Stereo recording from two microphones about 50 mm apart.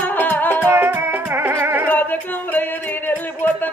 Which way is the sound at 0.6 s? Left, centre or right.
Right.